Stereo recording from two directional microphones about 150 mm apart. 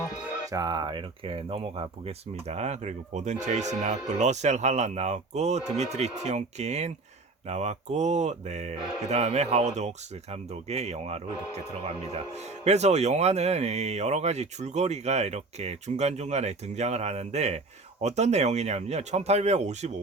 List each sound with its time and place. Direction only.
0.4 s speech: 25° right (ahead or behind); by 20.0 s 50° right (ahead or behind)